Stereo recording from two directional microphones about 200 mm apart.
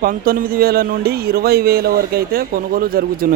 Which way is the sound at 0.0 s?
45° right (ahead or behind).